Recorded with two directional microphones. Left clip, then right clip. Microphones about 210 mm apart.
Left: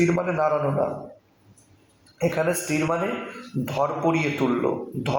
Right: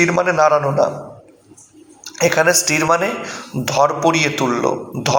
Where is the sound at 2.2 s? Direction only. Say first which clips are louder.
Right 10 dB; 30° right (ahead or behind).